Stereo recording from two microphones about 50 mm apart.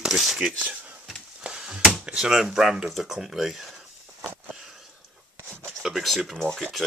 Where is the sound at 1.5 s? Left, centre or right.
Centre.